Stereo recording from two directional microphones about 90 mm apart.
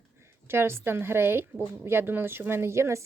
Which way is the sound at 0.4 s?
25° right (ahead or behind).